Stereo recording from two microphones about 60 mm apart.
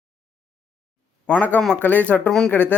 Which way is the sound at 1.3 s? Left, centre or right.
Left.